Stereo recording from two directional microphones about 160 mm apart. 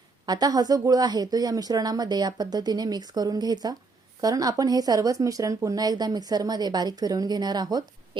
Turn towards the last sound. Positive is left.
turn(degrees=-25)  # may be behind; listen again after turning